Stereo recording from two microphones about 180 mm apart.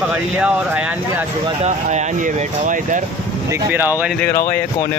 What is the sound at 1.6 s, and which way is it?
Speech, 40° right (ahead or behind).